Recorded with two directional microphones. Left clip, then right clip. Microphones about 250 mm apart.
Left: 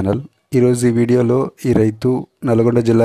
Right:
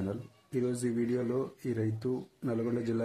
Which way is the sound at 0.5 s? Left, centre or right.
Left.